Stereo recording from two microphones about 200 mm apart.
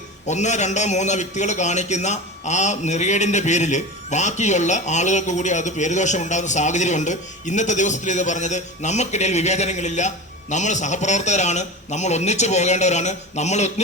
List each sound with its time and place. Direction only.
0.3 s a man's voice: 35° left (ahead or behind)